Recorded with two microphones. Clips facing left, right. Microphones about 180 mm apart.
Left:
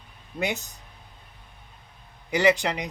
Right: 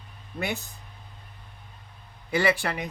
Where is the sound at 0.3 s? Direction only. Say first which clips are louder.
Left 2 dB; 20° left (ahead or behind).